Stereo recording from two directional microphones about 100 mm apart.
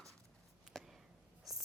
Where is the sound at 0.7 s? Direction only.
Centre (ahead or behind).